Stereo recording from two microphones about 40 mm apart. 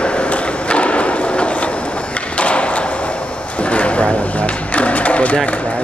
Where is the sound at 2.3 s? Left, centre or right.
Left.